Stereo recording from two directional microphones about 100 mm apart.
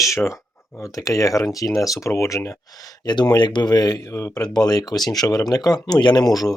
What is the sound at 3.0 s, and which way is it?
Speech, 40° left (ahead or behind).